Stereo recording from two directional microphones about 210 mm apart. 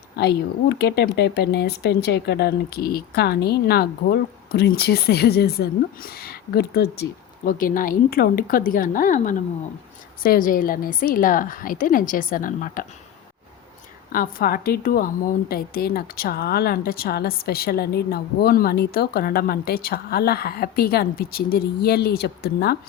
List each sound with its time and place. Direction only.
0.2 s a woman's voice: 50° left (ahead or behind)
14.1 s a woman's voice: 45° left (ahead or behind)